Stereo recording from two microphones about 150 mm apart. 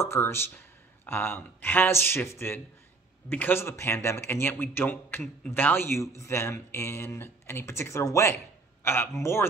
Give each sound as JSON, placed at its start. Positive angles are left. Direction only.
{"t": 0.0, "sound": "a man's voice", "side_deg": 15}